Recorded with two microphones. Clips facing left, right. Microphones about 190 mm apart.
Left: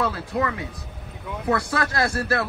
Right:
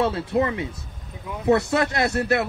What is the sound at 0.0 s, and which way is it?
A man's voice, 25° right (ahead or behind).